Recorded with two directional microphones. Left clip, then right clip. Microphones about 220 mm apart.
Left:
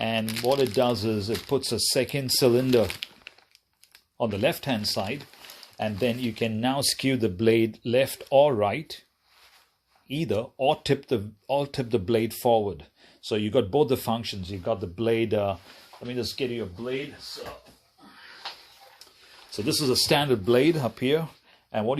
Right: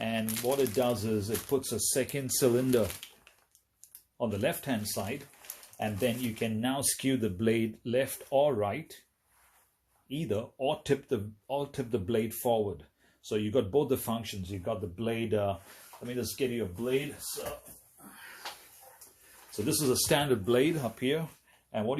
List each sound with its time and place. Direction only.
0.0 s a sound: 35° left (ahead or behind)
0.4 s speech: 45° left (ahead or behind)
4.2 s speech: 35° left (ahead or behind)
10.1 s speech: 35° left (ahead or behind)
19.6 s speech: 25° left (ahead or behind)